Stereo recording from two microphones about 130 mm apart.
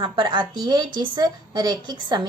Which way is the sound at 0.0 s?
35° right (ahead or behind).